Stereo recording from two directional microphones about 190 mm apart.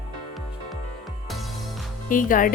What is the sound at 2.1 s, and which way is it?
Speech, 45° left (ahead or behind).